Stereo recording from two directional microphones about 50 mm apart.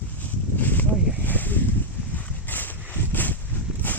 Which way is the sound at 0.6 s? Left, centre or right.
Left.